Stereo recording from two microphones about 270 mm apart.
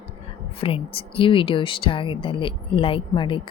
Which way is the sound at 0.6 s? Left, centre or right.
Centre.